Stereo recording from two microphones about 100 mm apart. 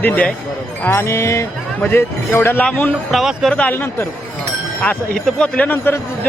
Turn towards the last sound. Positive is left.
turn(degrees=15)  # may be behind; listen again after turning